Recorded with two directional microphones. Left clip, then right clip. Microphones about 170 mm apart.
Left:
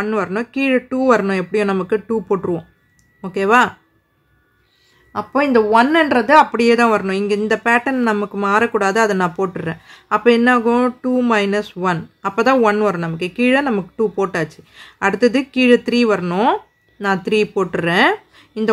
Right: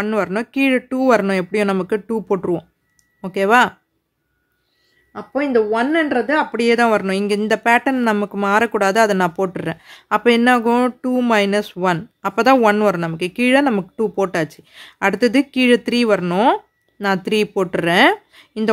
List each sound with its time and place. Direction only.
0.0 s speech: 30° right (ahead or behind)
5.1 s speech: 5° left (ahead or behind)
6.5 s speech: 20° right (ahead or behind)